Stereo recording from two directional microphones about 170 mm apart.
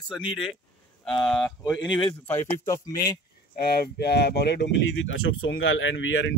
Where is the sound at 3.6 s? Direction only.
65° left (ahead or behind).